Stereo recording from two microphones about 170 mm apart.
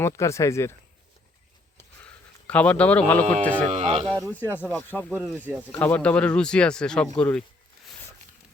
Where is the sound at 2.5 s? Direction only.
10° left (ahead or behind).